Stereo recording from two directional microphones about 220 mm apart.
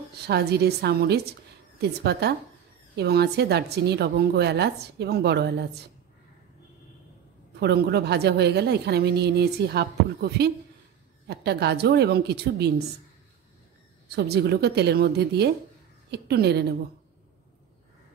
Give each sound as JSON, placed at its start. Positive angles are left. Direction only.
{"t": 0.3, "sound": "a woman's voice", "side_deg": -45}
{"t": 7.5, "sound": "a woman's voice", "side_deg": -45}
{"t": 14.0, "sound": "a woman's voice", "side_deg": -45}